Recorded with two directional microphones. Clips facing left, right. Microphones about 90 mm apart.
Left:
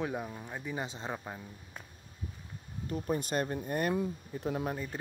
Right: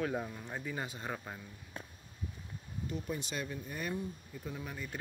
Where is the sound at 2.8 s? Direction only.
45° left (ahead or behind); by 4.7 s 65° left (ahead or behind).